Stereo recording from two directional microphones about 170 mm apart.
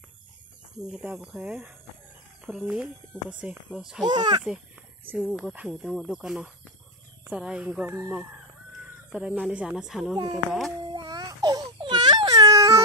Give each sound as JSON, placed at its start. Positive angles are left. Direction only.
{"t": 0.8, "sound": "speech", "side_deg": -5}
{"t": 4.0, "sound": "speech", "side_deg": -25}
{"t": 5.1, "sound": "speech", "side_deg": -10}
{"t": 9.1, "sound": "speech", "side_deg": -5}
{"t": 10.1, "sound": "speech", "side_deg": -20}
{"t": 10.9, "sound": "baby cry", "side_deg": -25}